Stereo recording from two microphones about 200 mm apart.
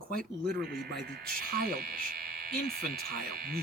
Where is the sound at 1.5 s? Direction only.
50° right (ahead or behind).